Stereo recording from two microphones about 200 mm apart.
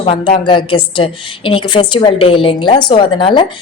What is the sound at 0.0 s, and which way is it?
A woman's voice, 25° left (ahead or behind).